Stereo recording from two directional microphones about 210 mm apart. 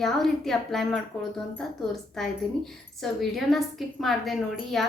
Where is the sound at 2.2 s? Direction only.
Centre (ahead or behind).